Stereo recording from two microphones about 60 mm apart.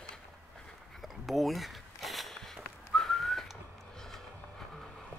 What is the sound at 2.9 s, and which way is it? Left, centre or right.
Whistling, centre.